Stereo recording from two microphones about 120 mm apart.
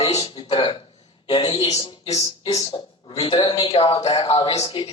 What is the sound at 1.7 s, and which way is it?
Speech, 35° left (ahead or behind).